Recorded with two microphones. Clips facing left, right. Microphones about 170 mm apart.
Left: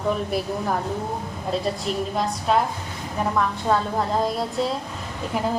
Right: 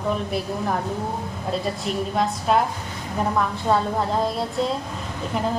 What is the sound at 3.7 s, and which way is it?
Speech, centre (ahead or behind).